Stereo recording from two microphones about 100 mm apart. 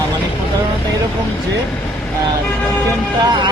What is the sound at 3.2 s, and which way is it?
Speech, 45° right (ahead or behind).